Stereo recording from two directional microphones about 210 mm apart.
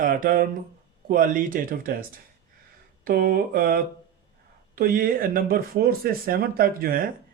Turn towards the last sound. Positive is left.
turn(degrees=-45)  # may be behind; listen again after turning